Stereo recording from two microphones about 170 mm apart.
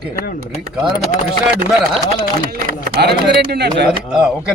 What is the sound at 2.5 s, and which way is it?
Speech, 70° right (ahead or behind).